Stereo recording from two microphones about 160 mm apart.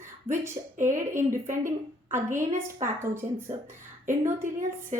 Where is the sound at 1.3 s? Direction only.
55° right (ahead or behind).